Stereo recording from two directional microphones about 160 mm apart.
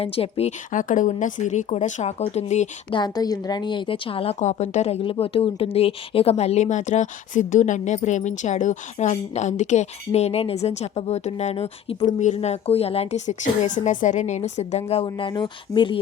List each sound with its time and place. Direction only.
0.0 s a woman's voice: 40° left (ahead or behind)
0.7 s a woman's voice: 55° left (ahead or behind)
2.9 s a woman's voice: 25° left (ahead or behind)